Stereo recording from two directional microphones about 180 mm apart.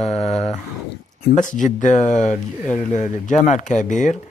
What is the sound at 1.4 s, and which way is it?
Speech, 45° left (ahead or behind).